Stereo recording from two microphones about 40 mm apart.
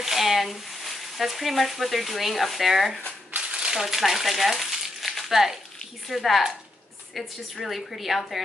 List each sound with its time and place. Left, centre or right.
0.0 s speech: centre
3.5 s a sound: centre
3.8 s a woman's voice: centre